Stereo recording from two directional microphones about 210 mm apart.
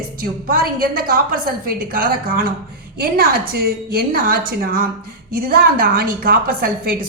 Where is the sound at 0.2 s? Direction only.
45° right (ahead or behind).